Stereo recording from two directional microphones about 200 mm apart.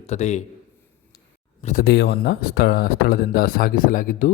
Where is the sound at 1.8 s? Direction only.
55° left (ahead or behind).